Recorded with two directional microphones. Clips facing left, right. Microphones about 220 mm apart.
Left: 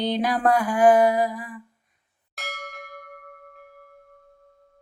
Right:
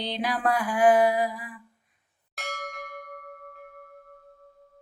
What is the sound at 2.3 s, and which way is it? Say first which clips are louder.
Bell: right 1 dB; centre (ahead or behind).